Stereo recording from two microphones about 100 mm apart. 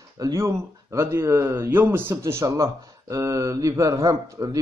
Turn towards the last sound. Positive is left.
turn(degrees=-30)  # may be behind; listen again after turning